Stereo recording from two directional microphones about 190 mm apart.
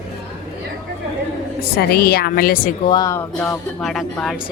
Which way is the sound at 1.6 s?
55° left (ahead or behind).